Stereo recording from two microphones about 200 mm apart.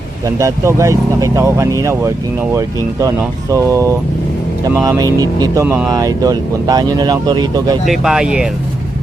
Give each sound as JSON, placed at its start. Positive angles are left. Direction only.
{"t": 0.3, "sound": "speech", "side_deg": -15}
{"t": 7.9, "sound": "speech", "side_deg": -5}